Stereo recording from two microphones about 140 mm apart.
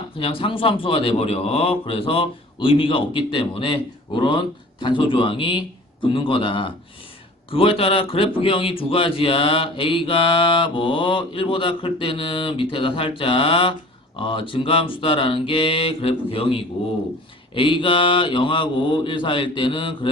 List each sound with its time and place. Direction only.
0.2 s a man's voice: 40° left (ahead or behind)